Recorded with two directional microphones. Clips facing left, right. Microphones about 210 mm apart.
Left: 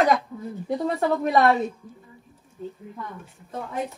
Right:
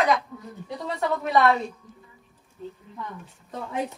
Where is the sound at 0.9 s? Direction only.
35° left (ahead or behind).